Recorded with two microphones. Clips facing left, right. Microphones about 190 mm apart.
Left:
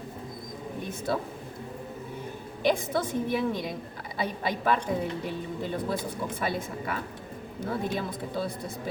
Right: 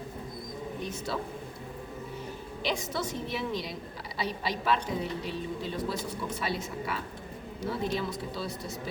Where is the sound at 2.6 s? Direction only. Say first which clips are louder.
Left 6 dB; 55° left (ahead or behind).